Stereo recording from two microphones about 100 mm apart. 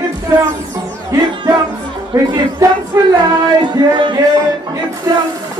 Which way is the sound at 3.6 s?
55° right (ahead or behind).